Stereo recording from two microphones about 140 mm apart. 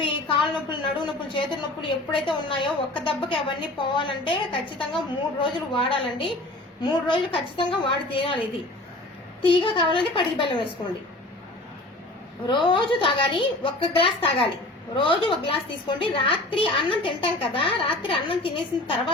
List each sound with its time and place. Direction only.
0.0 s a sound: 40° left (ahead or behind)
1.3 s a woman's voice: 35° left (ahead or behind)
12.5 s a woman's voice: 35° left (ahead or behind)